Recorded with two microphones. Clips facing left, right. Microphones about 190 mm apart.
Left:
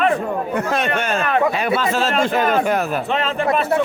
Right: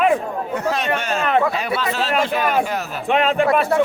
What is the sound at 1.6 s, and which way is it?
Speech, 45° left (ahead or behind).